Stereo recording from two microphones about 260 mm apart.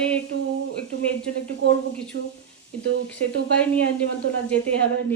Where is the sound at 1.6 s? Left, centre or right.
Right.